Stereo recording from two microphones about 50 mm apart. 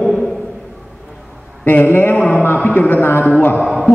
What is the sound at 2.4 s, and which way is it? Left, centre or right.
Speech, left.